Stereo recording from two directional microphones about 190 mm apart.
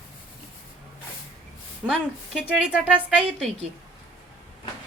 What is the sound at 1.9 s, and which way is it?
A woman's voice, centre (ahead or behind).